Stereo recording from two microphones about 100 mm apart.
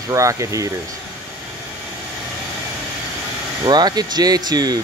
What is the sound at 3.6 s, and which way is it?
Speech, 45° right (ahead or behind).